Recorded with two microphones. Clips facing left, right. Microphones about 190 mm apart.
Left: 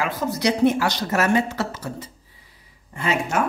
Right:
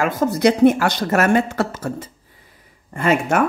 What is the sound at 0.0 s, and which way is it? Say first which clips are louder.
Speech: right 6 dB; 50° right (ahead or behind).